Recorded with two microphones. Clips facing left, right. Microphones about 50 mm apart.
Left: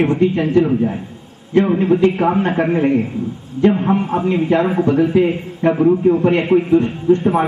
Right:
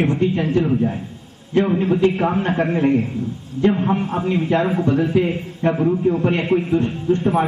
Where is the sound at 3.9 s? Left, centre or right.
Centre.